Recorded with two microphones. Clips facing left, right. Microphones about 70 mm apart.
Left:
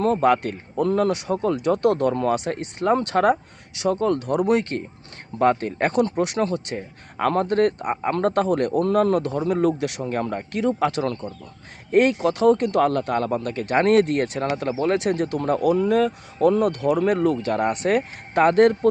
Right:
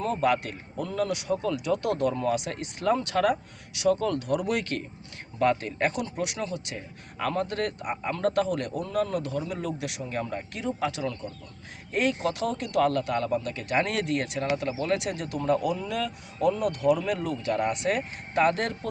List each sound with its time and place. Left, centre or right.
0.0 s speech: left